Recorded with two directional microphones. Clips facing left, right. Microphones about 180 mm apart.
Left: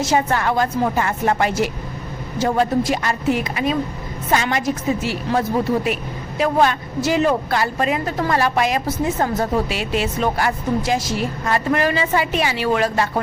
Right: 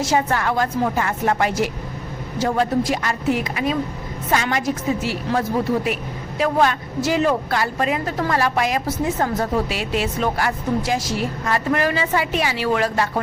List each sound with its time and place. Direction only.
0.0 s a woman's voice: 25° left (ahead or behind)